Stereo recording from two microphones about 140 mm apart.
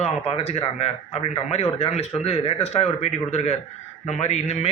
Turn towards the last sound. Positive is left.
turn(degrees=50)  # may be behind; listen again after turning